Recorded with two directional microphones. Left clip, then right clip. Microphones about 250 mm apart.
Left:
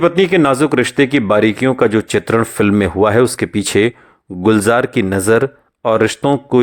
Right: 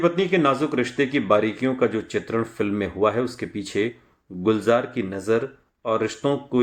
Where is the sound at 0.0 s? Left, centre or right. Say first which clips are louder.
Left 8 dB; left.